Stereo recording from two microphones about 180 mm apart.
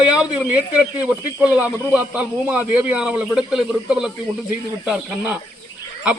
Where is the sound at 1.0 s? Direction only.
5° right (ahead or behind).